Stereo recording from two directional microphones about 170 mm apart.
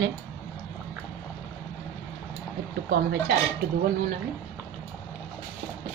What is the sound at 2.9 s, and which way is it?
Speech, 75° right (ahead or behind).